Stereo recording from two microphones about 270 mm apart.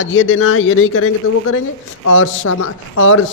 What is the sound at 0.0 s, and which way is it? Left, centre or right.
A man's voice, left.